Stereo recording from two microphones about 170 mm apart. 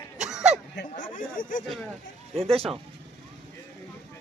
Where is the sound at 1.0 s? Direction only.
55° left (ahead or behind).